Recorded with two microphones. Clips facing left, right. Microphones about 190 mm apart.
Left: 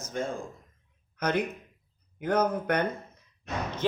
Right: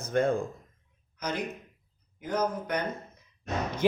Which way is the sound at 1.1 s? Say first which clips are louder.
Left 5 dB; 60° left (ahead or behind).